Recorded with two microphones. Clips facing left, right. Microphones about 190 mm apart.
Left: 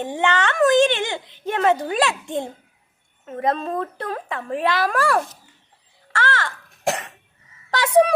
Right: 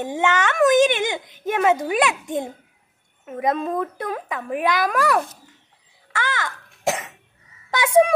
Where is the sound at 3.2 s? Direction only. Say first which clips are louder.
Even; 10° right (ahead or behind).